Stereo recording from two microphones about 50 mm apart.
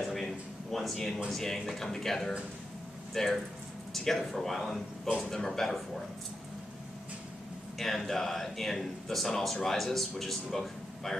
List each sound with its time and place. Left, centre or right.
0.1 s a sound: centre
1.3 s speech: centre
7.8 s speech: centre